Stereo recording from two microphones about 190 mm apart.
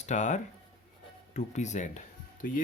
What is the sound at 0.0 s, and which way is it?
Speech, 40° left (ahead or behind).